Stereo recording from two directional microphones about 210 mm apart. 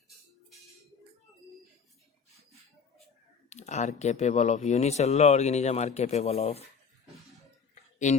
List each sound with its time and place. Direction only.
3.5 s speech: 35° left (ahead or behind)